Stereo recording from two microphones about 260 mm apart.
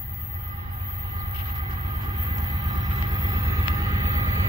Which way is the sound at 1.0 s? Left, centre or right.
Right.